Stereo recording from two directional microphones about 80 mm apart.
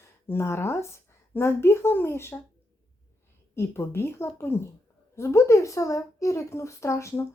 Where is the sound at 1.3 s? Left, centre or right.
Left.